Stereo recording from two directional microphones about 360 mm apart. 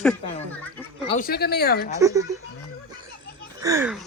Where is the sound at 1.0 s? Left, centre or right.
Left.